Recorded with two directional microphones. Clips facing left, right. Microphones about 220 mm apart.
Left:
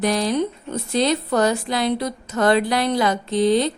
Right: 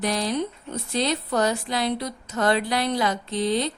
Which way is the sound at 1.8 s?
50° left (ahead or behind).